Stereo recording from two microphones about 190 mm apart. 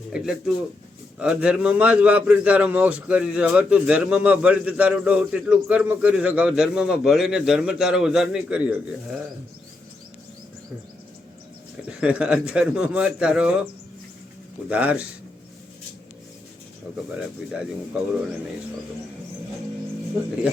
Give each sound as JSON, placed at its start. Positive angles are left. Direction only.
{"t": 0.1, "sound": "a man's voice", "side_deg": -5}
{"t": 11.9, "sound": "a man's voice", "side_deg": -5}
{"t": 14.7, "sound": "speech", "side_deg": -5}